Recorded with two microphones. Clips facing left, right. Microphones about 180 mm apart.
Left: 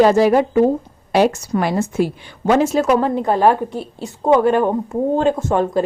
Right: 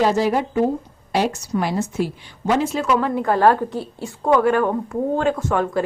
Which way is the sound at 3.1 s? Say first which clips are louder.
Left 1 dB; 20° left (ahead or behind).